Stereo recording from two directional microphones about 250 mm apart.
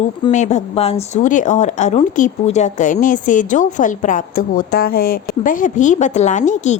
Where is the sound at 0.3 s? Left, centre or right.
Left.